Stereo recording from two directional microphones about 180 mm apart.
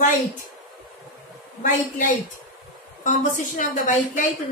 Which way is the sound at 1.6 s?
45° left (ahead or behind).